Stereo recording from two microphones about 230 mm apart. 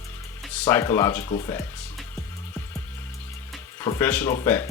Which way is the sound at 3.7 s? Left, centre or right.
Centre.